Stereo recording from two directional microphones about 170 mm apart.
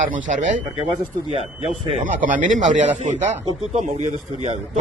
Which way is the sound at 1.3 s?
40° right (ahead or behind).